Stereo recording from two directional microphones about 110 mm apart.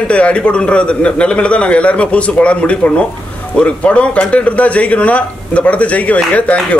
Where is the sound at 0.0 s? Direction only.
10° left (ahead or behind).